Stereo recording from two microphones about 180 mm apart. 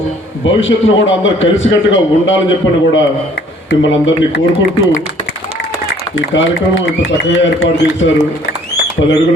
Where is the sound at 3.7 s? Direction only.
85° left.